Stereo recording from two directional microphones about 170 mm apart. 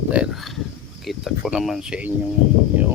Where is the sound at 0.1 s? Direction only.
5° right (ahead or behind).